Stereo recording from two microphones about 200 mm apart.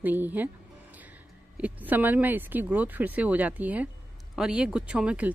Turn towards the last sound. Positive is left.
turn(degrees=-5)  # may be behind; listen again after turning